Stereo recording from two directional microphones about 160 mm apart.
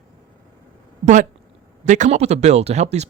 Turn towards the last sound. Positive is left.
turn(degrees=-45)  # may be behind; listen again after turning